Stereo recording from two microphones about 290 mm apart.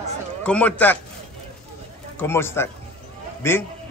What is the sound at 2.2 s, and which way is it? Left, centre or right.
A man's voice, centre.